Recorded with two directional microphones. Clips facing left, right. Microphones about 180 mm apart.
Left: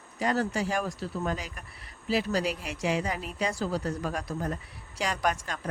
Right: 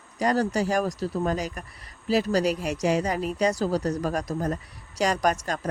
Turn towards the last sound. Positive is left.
turn(degrees=-40)  # may be behind; listen again after turning